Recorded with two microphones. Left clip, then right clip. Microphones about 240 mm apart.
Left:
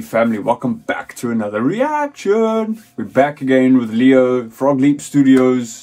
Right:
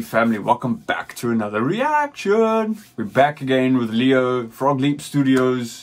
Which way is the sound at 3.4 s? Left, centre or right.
Centre.